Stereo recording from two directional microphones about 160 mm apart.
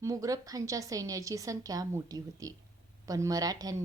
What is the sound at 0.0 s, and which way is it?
A woman's voice, 20° right (ahead or behind).